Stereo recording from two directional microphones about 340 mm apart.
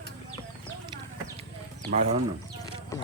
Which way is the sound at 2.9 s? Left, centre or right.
Centre.